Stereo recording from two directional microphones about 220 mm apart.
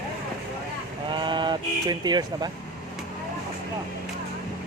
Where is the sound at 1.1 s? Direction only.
20° right (ahead or behind).